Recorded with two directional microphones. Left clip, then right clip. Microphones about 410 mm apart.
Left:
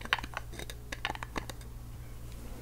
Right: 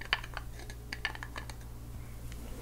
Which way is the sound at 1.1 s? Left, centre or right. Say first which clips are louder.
Left 4 dB; centre.